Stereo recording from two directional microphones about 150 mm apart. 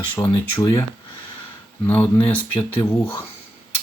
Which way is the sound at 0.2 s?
20° left (ahead or behind).